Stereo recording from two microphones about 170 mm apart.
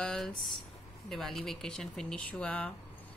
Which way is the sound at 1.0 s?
Centre (ahead or behind).